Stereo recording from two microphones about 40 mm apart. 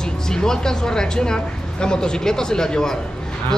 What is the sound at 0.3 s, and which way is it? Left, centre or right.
Speech, centre.